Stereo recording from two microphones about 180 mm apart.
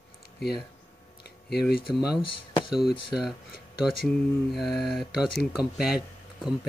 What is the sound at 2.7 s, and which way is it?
Speech, centre (ahead or behind).